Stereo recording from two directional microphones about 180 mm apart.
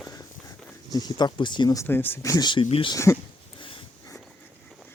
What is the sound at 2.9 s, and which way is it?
Speech, 15° left (ahead or behind).